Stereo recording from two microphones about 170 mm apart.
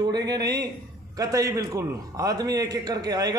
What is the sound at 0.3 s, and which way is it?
A man's voice, 20° right (ahead or behind).